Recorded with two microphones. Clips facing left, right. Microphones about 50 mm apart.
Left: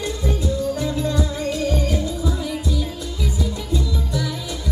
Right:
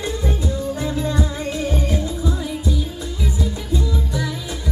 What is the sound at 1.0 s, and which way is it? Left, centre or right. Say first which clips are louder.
Music: even; right.